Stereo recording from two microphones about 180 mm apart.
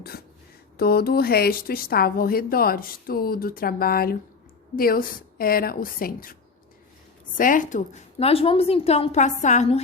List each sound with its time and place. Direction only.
0.8 s a woman's voice: 60° left (ahead or behind)
7.3 s a woman's voice: 50° left (ahead or behind)